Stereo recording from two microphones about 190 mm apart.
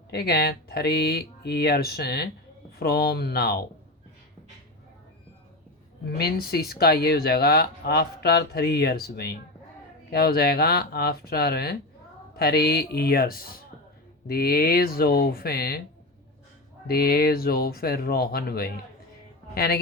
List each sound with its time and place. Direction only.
0.1 s speech: 55° left (ahead or behind)
6.1 s speech: 55° left (ahead or behind)
16.8 s speech: 55° left (ahead or behind)